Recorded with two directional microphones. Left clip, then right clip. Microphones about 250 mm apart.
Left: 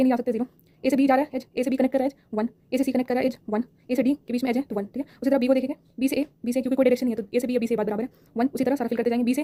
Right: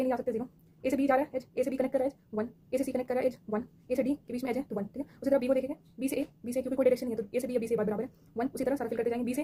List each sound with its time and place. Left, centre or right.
0.0 s a woman's voice: left